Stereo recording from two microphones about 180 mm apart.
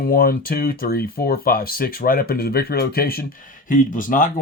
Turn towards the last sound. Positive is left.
turn(degrees=45)  # may be behind; listen again after turning